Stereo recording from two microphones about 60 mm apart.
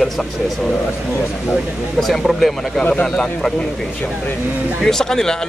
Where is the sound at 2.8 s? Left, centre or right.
Centre.